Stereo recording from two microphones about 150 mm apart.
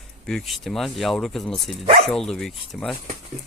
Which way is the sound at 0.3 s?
Centre (ahead or behind).